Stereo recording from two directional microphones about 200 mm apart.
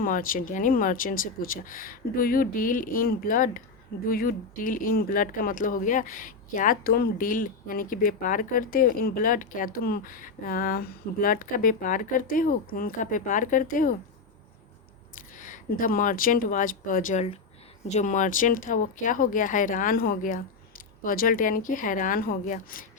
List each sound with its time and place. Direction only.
0.0 s speech: 45° left (ahead or behind)
15.1 s speech: 40° left (ahead or behind)